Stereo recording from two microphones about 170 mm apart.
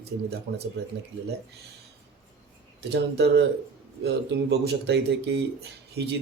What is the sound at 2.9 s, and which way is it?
Speech, 90° right.